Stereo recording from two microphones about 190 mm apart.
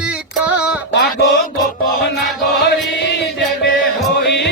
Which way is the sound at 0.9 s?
55° left (ahead or behind).